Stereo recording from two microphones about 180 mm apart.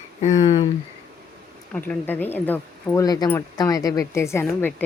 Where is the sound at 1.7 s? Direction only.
10° left (ahead or behind).